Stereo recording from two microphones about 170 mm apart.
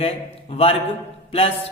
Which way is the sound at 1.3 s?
35° left (ahead or behind).